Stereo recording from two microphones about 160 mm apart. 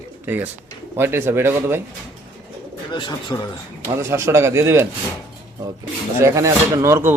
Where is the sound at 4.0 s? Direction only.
15° right (ahead or behind).